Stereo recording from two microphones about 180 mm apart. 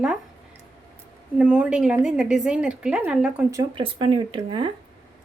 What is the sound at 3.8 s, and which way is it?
Speech, 30° right (ahead or behind).